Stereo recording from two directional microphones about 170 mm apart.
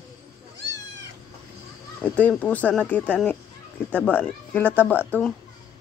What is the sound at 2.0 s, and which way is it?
Speech, 10° left (ahead or behind).